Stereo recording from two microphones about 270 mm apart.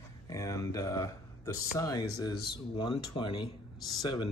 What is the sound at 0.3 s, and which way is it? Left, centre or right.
Speech, centre.